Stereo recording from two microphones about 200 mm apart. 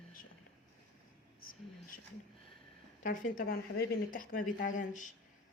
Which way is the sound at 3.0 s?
40° left (ahead or behind).